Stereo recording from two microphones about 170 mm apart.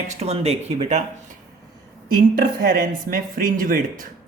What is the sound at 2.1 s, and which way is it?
Speech, 60° right (ahead or behind).